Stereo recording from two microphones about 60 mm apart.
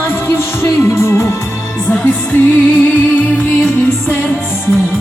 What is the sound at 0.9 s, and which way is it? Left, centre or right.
Music, left.